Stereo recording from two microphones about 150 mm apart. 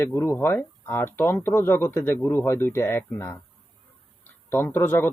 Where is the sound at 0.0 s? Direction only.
15° left (ahead or behind).